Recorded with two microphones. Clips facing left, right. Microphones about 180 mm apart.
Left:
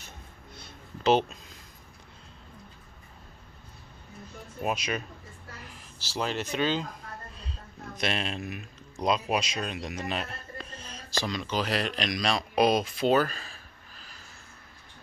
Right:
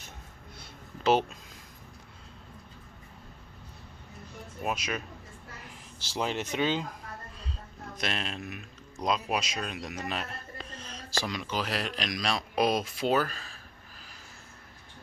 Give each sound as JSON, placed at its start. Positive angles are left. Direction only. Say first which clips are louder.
{"t": 1.0, "sound": "speech", "louder": "left 2 dB", "side_deg": -5}
{"t": 4.6, "sound": "speech", "louder": "left 2 dB", "side_deg": 0}
{"t": 5.6, "sound": "speech", "louder": "even", "side_deg": -20}
{"t": 7.9, "sound": "speech", "louder": "left 4 dB", "side_deg": 0}